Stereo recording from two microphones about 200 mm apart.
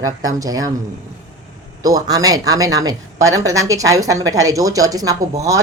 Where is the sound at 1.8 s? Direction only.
20° right (ahead or behind).